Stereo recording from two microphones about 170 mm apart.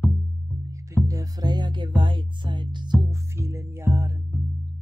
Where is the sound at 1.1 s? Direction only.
20° right (ahead or behind).